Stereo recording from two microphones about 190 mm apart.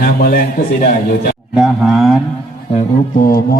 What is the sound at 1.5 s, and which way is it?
Speech, centre (ahead or behind).